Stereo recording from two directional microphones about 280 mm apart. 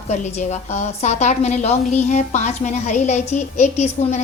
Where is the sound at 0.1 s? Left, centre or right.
Left.